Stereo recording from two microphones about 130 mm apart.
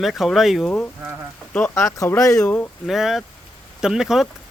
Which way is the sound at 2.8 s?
Centre (ahead or behind).